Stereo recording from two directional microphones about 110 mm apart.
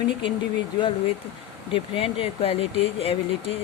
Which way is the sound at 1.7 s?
60° left (ahead or behind).